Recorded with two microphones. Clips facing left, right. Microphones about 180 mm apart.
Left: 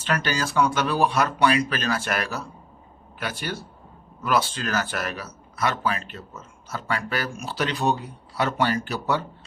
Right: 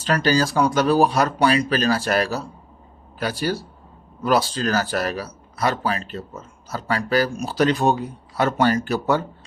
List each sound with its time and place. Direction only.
0.0 s speech: 35° right (ahead or behind)